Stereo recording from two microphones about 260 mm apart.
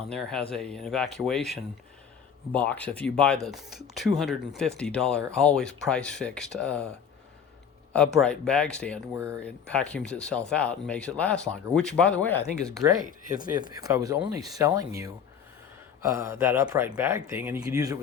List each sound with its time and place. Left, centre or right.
0.1 s speech: centre
7.9 s speech: centre
12.7 s speech: centre
13.1 s speech: right
13.4 s speech: centre